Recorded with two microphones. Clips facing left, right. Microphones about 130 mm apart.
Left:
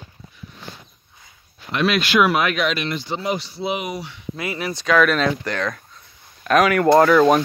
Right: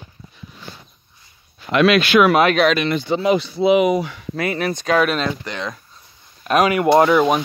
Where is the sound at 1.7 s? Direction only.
80° right.